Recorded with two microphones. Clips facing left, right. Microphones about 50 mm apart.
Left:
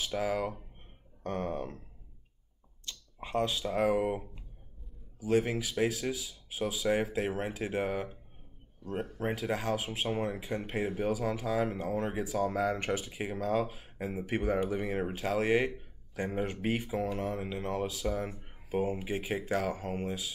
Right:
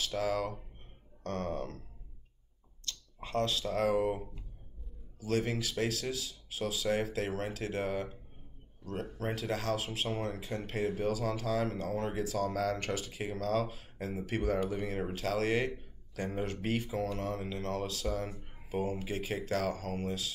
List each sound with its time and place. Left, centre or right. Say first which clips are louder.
0.0 s speech: left 1 dB; centre
9.2 s speech: left 2 dB; centre